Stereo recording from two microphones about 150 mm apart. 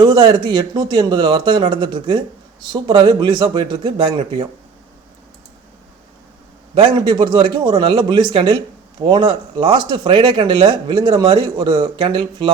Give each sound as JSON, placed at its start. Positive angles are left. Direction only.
{"t": 0.0, "sound": "speech", "side_deg": -30}
{"t": 6.7, "sound": "speech", "side_deg": -35}